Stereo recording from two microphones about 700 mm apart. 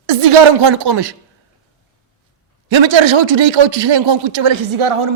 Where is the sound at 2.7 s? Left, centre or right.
Right.